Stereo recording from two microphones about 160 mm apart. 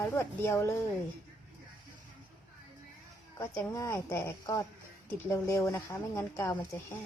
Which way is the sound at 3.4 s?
20° left (ahead or behind).